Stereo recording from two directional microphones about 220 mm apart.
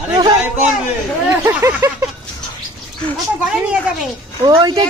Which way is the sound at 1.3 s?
15° right (ahead or behind).